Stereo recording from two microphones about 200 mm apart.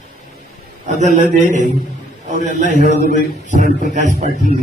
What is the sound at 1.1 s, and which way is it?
A man's voice, 40° right (ahead or behind).